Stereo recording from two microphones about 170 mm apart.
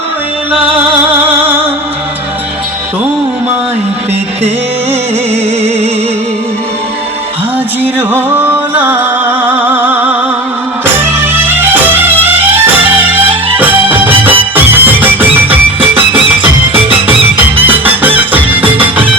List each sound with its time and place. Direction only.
1.3 s music: 10° right (ahead or behind)
5.3 s music: 40° right (ahead or behind)
7.9 s music: 10° right (ahead or behind)
13.9 s music: 10° right (ahead or behind)
15.8 s music: 30° right (ahead or behind)
17.7 s music: 10° right (ahead or behind)